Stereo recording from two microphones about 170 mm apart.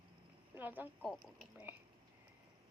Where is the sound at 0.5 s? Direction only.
10° right (ahead or behind).